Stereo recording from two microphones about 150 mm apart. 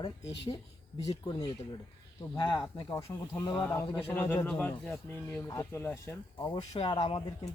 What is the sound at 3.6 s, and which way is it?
Speech, 10° left (ahead or behind).